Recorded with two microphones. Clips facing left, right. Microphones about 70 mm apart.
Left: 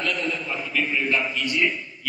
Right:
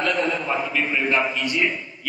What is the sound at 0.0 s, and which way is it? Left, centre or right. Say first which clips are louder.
A man's voice: right 4 dB; right.